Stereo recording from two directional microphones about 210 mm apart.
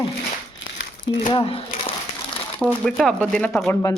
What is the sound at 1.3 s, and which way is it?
Speech, 25° left (ahead or behind).